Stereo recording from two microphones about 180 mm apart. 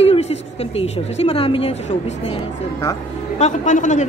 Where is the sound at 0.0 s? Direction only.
35° left (ahead or behind).